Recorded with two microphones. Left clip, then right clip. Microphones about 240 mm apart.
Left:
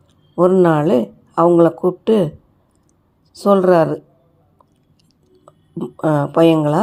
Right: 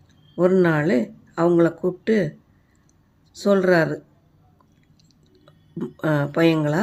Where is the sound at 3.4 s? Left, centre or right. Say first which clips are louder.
Left 6 dB; centre.